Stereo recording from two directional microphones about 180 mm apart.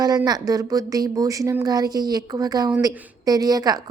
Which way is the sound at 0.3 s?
20° right (ahead or behind).